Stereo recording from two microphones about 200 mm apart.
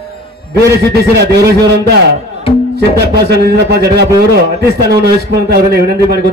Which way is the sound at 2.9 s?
55° right (ahead or behind).